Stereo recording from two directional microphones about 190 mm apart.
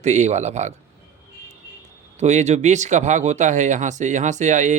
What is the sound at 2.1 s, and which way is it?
Speech, 35° right (ahead or behind).